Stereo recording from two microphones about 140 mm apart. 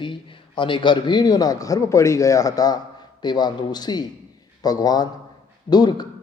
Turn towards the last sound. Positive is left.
turn(degrees=30)  # may be behind; listen again after turning